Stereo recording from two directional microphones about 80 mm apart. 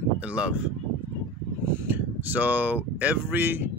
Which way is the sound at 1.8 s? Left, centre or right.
Right.